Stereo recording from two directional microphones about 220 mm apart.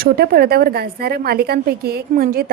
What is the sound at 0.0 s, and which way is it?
A woman's voice, 45° right (ahead or behind).